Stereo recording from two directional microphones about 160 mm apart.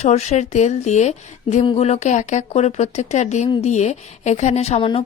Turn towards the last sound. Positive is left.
turn(degrees=35)  # may be behind; listen again after turning